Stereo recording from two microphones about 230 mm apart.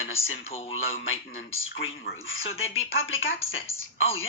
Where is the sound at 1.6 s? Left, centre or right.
Left.